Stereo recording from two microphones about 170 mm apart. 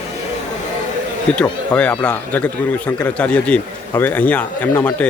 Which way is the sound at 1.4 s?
10° left (ahead or behind).